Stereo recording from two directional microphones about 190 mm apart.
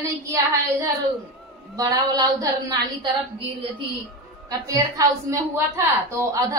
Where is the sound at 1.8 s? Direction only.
20° right (ahead or behind).